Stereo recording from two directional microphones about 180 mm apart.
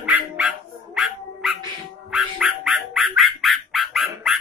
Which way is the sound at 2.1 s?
5° right (ahead or behind).